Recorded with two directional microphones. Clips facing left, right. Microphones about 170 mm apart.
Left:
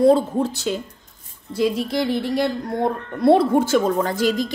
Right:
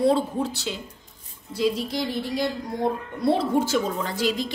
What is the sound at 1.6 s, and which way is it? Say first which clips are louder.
A woman's voice: left 4 dB; 60° left (ahead or behind).